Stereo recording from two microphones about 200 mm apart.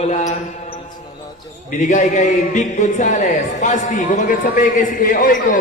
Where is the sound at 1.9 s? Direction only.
35° left (ahead or behind).